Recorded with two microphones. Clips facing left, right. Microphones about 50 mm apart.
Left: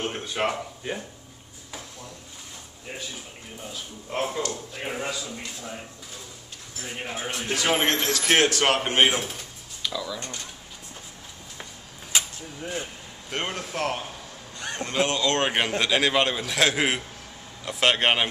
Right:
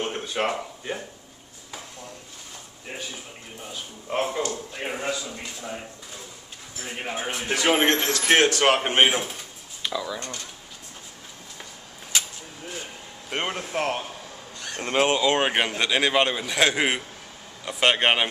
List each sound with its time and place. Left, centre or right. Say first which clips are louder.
0.0 s a sound: right 1 dB; centre
3.6 s a man's voice: right 2 dB; centre
8.7 s speech: right 1 dB; centre
13.3 s speech: right 2 dB; centre
14.8 s speech: right 4 dB; right
15.1 s a man's voice: right 2 dB; centre